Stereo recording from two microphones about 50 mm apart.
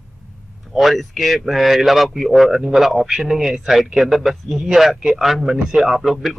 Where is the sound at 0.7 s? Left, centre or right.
Centre.